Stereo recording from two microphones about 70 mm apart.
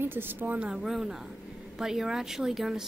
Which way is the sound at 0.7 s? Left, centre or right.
Centre.